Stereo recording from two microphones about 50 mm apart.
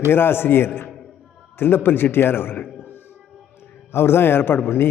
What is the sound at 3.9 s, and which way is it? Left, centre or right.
Speech, left.